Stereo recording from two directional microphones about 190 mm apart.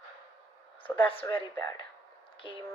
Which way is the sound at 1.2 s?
15° left (ahead or behind).